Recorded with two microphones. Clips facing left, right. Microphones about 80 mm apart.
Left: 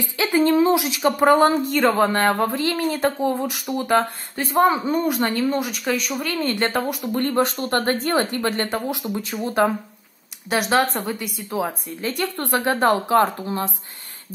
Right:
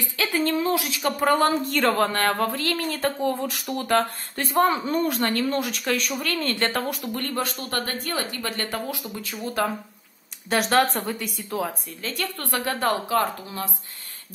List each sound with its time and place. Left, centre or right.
0.0 s speech: centre
1.6 s speech: centre
6.1 s speech: centre
7.1 s speech: left
10.5 s a woman's voice: centre
11.5 s speech: centre